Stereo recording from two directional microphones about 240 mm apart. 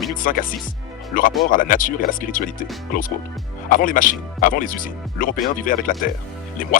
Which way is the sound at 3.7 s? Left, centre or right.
Left.